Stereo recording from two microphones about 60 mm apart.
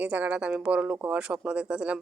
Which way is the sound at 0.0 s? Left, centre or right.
Right.